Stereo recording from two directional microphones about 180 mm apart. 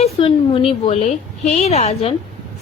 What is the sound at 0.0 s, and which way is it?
A woman's voice, 30° left (ahead or behind).